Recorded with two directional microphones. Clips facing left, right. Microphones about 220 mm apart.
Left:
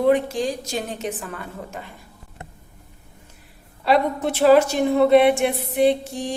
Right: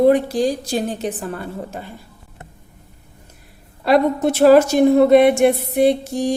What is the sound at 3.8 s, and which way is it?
A woman's voice, 45° right (ahead or behind).